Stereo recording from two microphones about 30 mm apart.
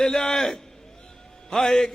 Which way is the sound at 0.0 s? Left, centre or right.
Left.